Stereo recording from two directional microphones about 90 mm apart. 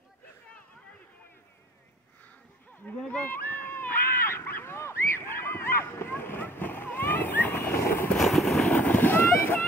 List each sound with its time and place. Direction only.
3.1 s a sound: 20° left (ahead or behind)
8.2 s vehicle: centre (ahead or behind)
8.7 s boat: 20° left (ahead or behind)